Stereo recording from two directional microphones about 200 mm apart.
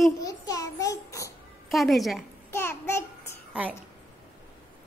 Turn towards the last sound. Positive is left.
turn(degrees=-5)  # may be behind; listen again after turning